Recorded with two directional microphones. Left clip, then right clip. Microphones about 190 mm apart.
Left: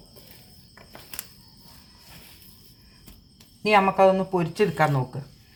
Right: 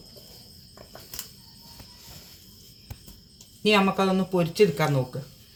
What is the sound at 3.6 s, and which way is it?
Speech, 30° left (ahead or behind).